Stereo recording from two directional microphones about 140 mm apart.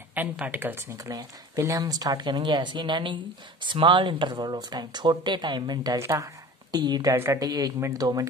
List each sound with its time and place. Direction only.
0.1 s speech: 15° right (ahead or behind); by 5.9 s 30° right (ahead or behind)
5.9 s speech: 20° right (ahead or behind)